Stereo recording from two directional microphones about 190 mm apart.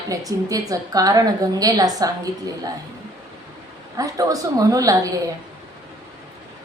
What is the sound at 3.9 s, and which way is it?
A woman's voice, 20° right (ahead or behind).